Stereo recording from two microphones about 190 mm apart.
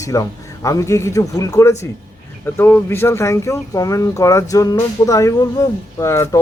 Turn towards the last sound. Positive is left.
turn(degrees=15)  # may be behind; listen again after turning